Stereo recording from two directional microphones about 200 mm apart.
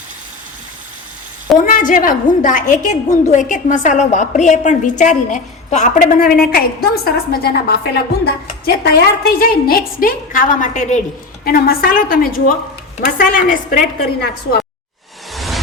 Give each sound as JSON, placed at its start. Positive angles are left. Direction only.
{"t": 1.6, "sound": "a woman's voice", "side_deg": 40}
{"t": 11.4, "sound": "a woman's voice", "side_deg": 50}
{"t": 15.3, "sound": "music", "side_deg": 0}